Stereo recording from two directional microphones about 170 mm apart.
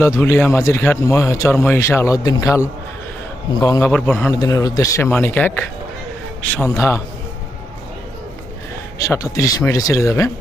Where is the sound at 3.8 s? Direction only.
10° left (ahead or behind).